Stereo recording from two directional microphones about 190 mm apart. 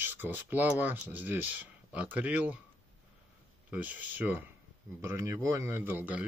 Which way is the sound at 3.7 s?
10° right (ahead or behind).